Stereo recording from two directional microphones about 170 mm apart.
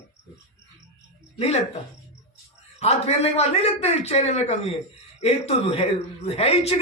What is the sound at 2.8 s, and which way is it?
A man's voice, 40° left (ahead or behind).